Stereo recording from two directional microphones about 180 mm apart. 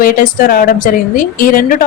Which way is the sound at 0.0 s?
50° left (ahead or behind).